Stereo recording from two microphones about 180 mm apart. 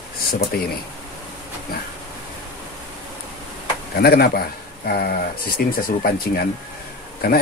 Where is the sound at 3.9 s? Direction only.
60° left (ahead or behind).